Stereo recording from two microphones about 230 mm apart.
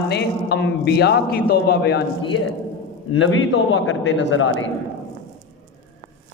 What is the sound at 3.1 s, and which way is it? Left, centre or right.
A man's voice, left.